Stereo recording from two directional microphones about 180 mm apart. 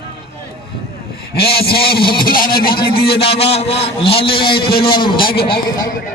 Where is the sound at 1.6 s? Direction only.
60° left (ahead or behind).